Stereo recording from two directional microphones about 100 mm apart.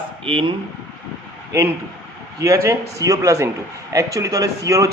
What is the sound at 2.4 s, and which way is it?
A man's voice, 30° right (ahead or behind).